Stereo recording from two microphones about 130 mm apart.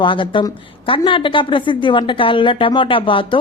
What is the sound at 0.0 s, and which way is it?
A woman's voice, 40° left (ahead or behind).